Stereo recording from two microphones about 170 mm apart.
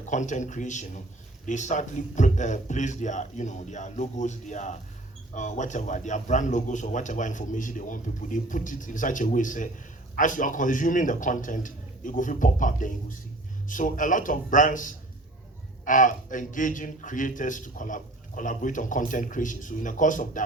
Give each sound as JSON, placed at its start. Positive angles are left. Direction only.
{"t": 0.1, "sound": "a man's voice", "side_deg": 45}